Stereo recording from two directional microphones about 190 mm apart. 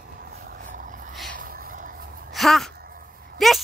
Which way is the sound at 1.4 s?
50° right (ahead or behind).